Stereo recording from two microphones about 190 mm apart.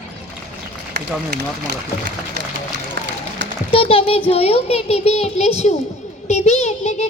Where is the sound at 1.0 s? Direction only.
60° right (ahead or behind).